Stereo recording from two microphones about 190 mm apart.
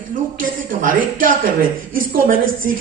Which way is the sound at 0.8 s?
45° right (ahead or behind).